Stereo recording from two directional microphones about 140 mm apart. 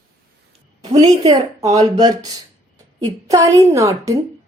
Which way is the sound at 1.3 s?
25° right (ahead or behind).